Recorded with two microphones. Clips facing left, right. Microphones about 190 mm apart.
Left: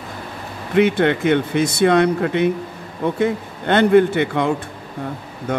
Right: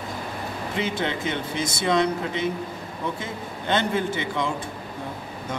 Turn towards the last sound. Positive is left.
turn(degrees=60)  # may be behind; listen again after turning